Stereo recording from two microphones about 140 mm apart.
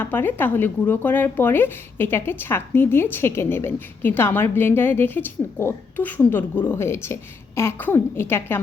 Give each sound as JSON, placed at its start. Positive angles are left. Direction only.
{"t": 0.0, "sound": "speech", "side_deg": 15}